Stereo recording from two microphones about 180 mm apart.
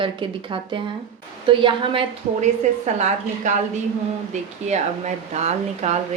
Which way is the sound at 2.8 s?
40° right (ahead or behind).